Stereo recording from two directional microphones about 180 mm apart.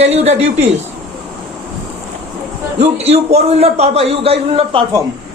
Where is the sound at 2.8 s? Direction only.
35° right (ahead or behind).